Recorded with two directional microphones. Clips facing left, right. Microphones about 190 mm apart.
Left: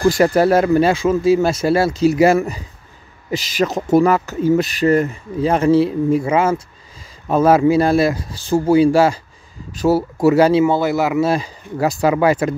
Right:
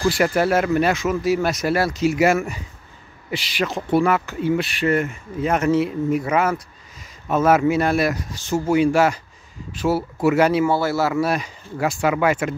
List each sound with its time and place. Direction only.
0.2 s speech: 35° left (ahead or behind)